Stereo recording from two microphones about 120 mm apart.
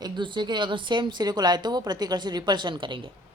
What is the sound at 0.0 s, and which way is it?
A woman's voice, 40° right (ahead or behind).